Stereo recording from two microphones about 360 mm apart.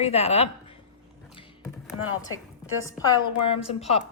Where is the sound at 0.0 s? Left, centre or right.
Centre.